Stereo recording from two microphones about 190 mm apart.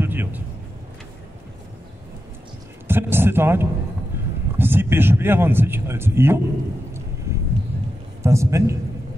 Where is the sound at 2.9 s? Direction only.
10° right (ahead or behind).